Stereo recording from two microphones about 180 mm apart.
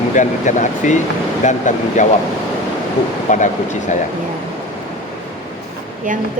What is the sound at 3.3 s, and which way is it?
Speech, 45° left (ahead or behind).